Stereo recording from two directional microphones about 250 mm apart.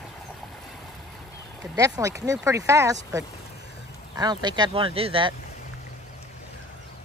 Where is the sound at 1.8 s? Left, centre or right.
Centre.